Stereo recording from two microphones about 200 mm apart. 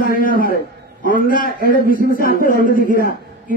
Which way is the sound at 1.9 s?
45° left (ahead or behind).